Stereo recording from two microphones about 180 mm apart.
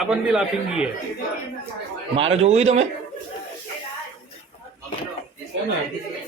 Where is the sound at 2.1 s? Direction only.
35° right (ahead or behind).